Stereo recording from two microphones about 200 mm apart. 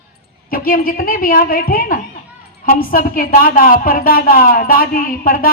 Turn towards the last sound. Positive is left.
turn(degrees=45)  # may be behind; listen again after turning